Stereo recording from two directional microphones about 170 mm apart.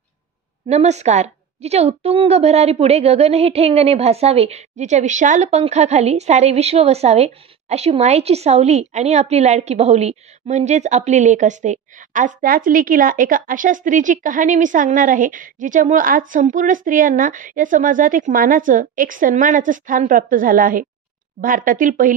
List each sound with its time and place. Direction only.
0.7 s a woman's voice: 40° right (ahead or behind)